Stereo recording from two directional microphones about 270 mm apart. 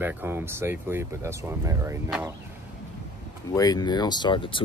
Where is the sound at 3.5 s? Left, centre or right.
Centre.